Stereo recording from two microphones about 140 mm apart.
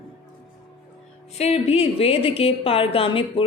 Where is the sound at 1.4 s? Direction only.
45° left (ahead or behind).